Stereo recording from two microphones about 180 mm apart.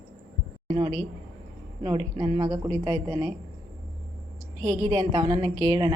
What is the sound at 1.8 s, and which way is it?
A woman's voice, 25° right (ahead or behind).